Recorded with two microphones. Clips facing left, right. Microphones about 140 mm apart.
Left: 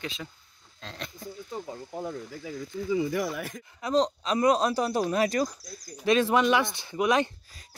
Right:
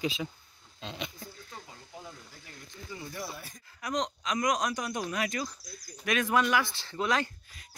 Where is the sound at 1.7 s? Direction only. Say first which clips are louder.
Left 12 dB; 55° left (ahead or behind).